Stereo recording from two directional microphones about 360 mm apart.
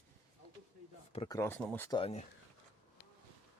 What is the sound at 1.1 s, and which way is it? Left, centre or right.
Speech, centre.